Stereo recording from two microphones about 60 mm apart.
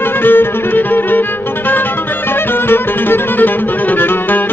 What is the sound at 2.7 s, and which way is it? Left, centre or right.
Music, left.